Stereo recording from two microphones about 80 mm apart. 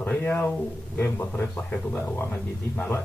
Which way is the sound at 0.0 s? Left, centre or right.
Left.